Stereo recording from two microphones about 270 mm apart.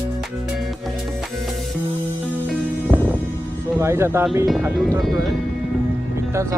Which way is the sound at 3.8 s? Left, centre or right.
Centre.